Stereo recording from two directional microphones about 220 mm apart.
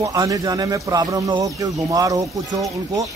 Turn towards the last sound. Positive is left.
turn(degrees=-15)  # may be behind; listen again after turning